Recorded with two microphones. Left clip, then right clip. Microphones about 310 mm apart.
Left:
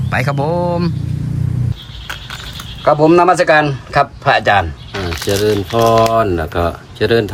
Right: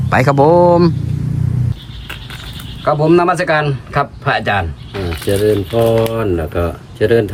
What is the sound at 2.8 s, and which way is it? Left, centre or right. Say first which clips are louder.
Speech: left 2 dB; centre.